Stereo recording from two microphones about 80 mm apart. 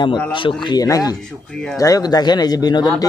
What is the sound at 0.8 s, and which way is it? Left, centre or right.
Speech, left.